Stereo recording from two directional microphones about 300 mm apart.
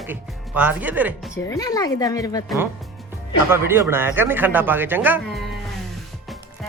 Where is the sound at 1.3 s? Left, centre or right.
Centre.